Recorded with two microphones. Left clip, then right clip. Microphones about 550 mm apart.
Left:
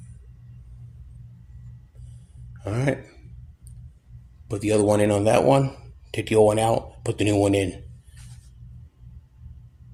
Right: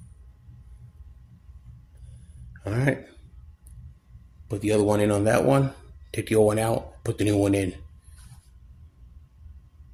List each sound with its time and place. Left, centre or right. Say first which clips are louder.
2.6 s speech: even; right
4.4 s speech: left 2 dB; right